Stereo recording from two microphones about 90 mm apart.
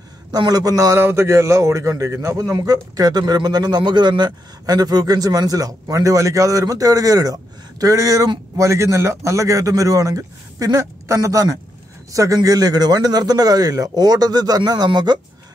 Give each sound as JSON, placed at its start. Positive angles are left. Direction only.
{"t": 0.3, "sound": "speech", "side_deg": -45}
{"t": 0.9, "sound": "a man's voice", "side_deg": -30}